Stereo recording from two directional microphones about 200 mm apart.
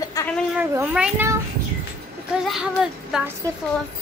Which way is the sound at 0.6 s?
5° right (ahead or behind).